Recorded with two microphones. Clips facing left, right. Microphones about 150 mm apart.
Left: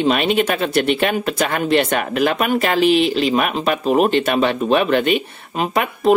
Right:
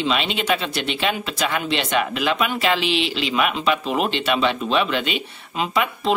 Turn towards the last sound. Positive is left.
turn(degrees=50)  # may be behind; listen again after turning